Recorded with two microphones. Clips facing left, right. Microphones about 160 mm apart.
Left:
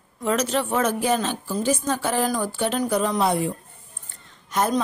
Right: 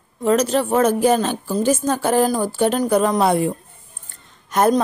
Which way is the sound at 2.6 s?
50° right (ahead or behind).